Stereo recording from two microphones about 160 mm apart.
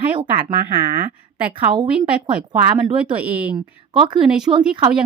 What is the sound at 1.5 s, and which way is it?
Speech, 30° right (ahead or behind).